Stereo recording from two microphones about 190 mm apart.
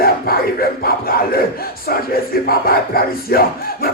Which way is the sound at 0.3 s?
50° left (ahead or behind).